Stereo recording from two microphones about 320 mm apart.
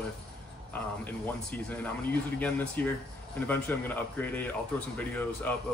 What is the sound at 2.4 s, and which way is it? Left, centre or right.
Speech, centre.